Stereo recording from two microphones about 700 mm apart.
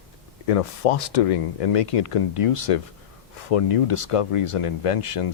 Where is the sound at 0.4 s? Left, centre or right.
Left.